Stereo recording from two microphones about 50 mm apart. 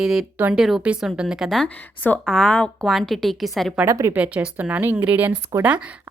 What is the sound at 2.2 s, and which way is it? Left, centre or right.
Speech, centre.